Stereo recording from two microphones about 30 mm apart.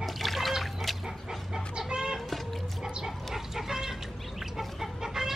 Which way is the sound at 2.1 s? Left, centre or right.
Centre.